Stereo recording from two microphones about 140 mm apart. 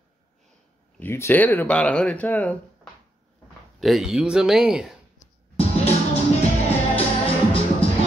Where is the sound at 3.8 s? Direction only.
Centre (ahead or behind).